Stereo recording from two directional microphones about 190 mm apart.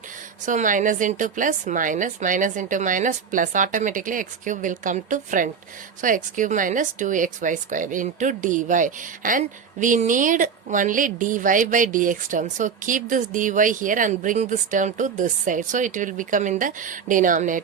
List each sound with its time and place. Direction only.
0.4 s speech: 45° right (ahead or behind)